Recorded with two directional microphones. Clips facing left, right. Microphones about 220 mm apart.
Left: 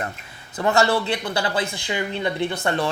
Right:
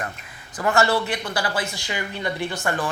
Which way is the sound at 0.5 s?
20° left (ahead or behind).